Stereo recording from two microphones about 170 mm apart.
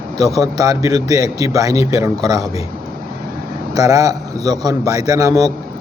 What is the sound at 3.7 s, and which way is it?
A man's voice, 20° right (ahead or behind).